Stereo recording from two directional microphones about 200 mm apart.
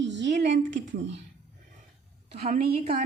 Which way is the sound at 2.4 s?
50° right (ahead or behind).